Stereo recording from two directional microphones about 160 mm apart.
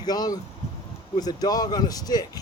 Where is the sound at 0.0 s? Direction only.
25° left (ahead or behind).